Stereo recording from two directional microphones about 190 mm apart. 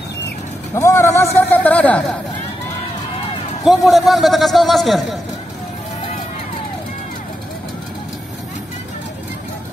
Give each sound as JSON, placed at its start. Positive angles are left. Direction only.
{"t": 0.7, "sound": "a man's voice", "side_deg": 15}
{"t": 3.6, "sound": "a man's voice", "side_deg": 0}